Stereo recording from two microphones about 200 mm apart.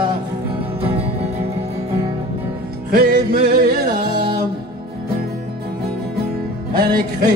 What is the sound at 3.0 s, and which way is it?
Music, 50° right (ahead or behind).